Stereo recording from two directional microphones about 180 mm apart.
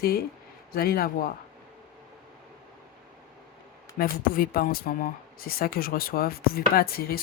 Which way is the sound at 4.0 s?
55° left (ahead or behind).